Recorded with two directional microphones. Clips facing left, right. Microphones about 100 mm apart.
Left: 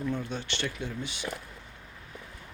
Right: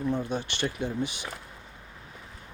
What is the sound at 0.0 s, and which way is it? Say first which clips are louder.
Speech: right 4 dB; 15° right (ahead or behind).